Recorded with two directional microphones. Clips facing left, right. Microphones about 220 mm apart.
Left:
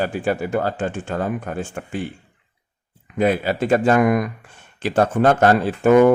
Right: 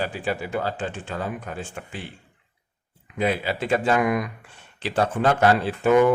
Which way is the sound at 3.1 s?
50° left (ahead or behind).